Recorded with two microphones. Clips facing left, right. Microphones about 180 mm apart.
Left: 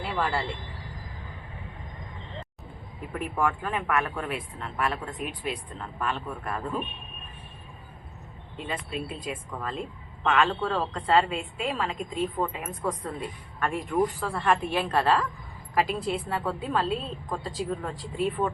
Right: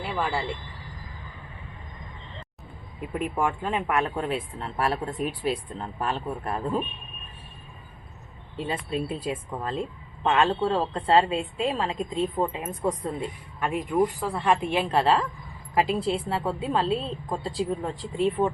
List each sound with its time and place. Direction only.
0.2 s speech: 5° right (ahead or behind)
3.1 s speech: 20° right (ahead or behind)
8.5 s speech: 35° right (ahead or behind)